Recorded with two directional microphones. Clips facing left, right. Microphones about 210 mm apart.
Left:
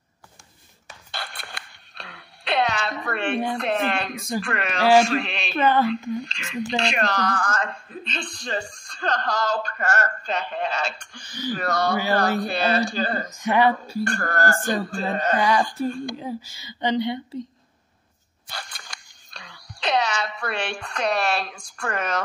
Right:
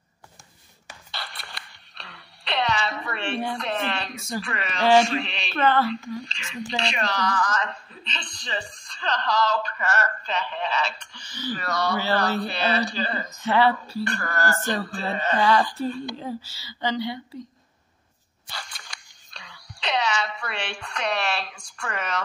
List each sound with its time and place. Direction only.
1.1 s music: 50° left (ahead or behind)
3.5 s a woman's voice: 50° left (ahead or behind)
5.5 s speech: 10° left (ahead or behind)
6.3 s a woman's voice: 50° left (ahead or behind)
13.4 s speech: 15° left (ahead or behind)
14.0 s a woman's voice: 50° left (ahead or behind)
16.4 s speech: 20° left (ahead or behind)
18.5 s a sound: 50° left (ahead or behind)
19.3 s a woman's voice: 45° left (ahead or behind)